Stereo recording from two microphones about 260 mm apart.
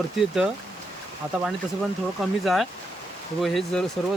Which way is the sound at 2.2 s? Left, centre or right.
Centre.